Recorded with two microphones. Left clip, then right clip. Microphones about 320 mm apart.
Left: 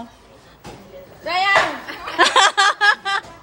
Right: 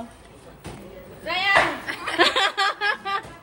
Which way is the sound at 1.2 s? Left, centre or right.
Left.